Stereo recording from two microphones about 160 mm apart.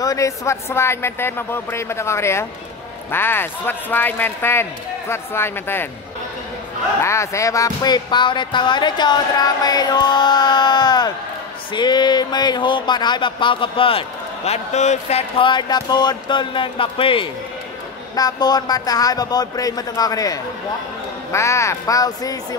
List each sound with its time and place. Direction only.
0.0 s a man's voice: 20° left (ahead or behind)
7.0 s speech: 15° left (ahead or behind)